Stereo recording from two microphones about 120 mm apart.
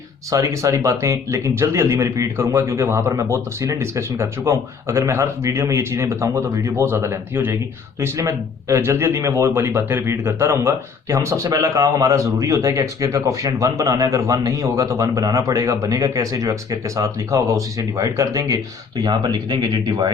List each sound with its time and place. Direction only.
0.3 s speech: 25° right (ahead or behind)